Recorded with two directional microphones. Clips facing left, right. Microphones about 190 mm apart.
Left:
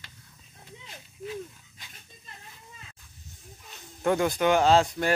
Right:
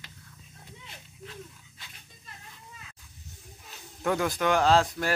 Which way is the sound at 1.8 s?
15° left (ahead or behind).